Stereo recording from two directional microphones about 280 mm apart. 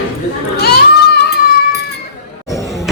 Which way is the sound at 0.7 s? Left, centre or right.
Left.